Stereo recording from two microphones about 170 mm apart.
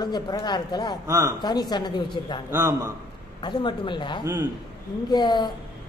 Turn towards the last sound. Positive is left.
turn(degrees=25)  # may be behind; listen again after turning